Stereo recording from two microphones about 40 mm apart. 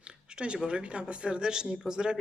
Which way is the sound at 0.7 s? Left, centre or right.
Right.